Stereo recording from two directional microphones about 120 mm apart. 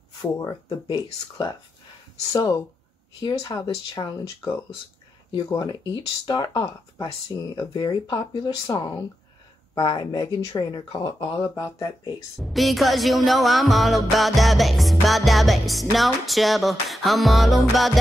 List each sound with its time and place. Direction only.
0.2 s speech: 35° left (ahead or behind)
5.3 s speech: 35° left (ahead or behind)
8.7 s speech: 25° left (ahead or behind)
9.8 s speech: 40° left (ahead or behind)
12.4 s music: centre (ahead or behind)